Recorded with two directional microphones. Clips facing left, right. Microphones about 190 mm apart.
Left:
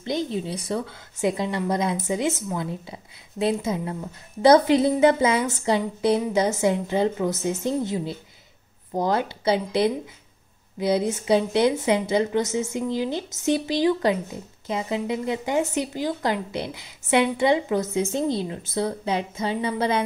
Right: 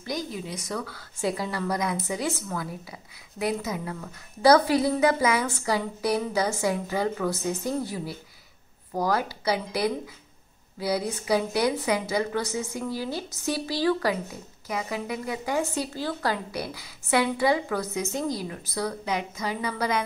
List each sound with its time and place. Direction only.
0.0 s speech: 25° left (ahead or behind)